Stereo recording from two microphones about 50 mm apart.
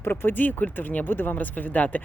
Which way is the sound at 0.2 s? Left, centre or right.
Left.